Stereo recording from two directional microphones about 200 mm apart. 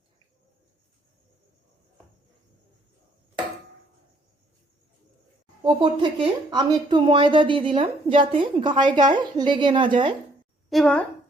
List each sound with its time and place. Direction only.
5.6 s speech: 25° right (ahead or behind)
10.7 s a woman's voice: centre (ahead or behind)